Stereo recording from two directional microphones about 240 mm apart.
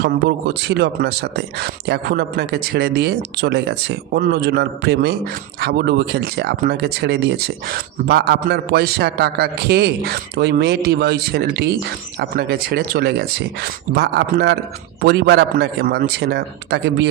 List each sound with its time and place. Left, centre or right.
0.0 s speech: right